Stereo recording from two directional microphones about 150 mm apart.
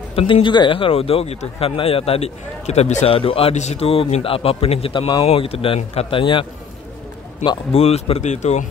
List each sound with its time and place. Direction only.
0.1 s a man's voice: 35° left (ahead or behind)
7.4 s speech: 40° left (ahead or behind)